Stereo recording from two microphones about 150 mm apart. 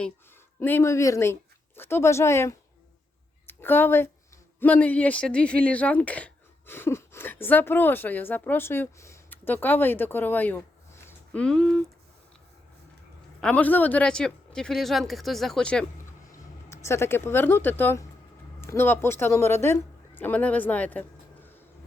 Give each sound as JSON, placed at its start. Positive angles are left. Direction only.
{"t": 0.6, "sound": "a woman's voice", "side_deg": 15}
{"t": 11.4, "sound": "speech", "side_deg": 5}
{"t": 13.4, "sound": "speech", "side_deg": 10}
{"t": 16.6, "sound": "speech", "side_deg": 20}